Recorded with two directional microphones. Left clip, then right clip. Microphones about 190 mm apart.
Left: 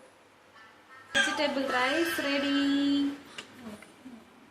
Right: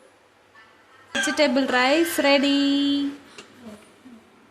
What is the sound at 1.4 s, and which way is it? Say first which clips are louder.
A woman's voice: right 8 dB; 65° right (ahead or behind).